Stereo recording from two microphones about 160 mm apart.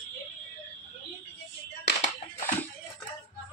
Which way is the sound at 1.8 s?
90° left.